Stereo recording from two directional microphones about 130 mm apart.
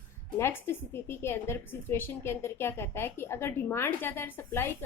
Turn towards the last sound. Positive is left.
turn(degrees=20)  # may be behind; listen again after turning